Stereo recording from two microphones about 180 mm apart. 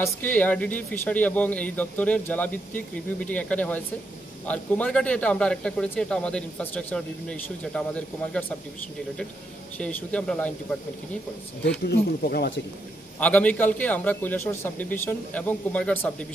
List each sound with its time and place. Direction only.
0.0 s speech: 10° left (ahead or behind)
9.8 s speech: 5° left (ahead or behind)
11.8 s speech: 60° left (ahead or behind)
13.2 s speech: 10° left (ahead or behind)